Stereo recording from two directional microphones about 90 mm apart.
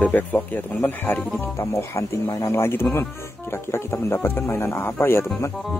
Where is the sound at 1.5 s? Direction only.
30° left (ahead or behind).